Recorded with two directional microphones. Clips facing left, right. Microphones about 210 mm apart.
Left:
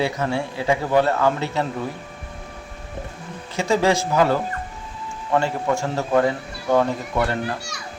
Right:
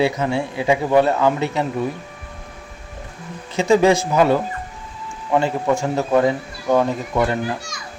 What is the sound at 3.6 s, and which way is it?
Speech, 15° right (ahead or behind).